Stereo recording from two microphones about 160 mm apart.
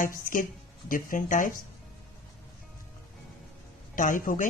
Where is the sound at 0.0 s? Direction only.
60° left (ahead or behind).